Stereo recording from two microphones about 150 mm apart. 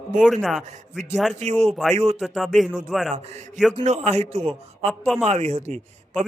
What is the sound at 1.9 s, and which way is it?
Speech, 45° right (ahead or behind).